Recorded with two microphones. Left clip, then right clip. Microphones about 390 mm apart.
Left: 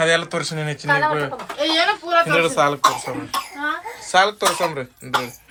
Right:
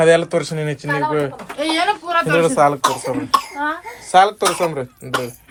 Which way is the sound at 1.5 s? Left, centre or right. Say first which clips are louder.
Even; centre.